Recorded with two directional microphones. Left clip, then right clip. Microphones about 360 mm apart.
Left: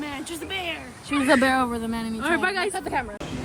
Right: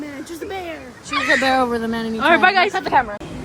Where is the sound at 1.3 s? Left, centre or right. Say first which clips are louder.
Right 3 dB; centre.